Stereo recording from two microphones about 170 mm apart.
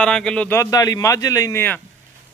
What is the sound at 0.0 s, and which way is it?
A man's voice, 5° left (ahead or behind).